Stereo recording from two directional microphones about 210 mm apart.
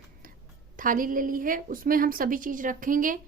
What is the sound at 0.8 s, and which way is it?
A woman's voice, 40° right (ahead or behind).